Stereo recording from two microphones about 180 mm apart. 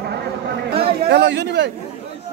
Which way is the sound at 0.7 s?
70° right (ahead or behind).